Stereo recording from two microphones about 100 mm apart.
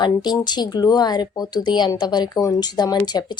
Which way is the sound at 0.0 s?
45° left (ahead or behind).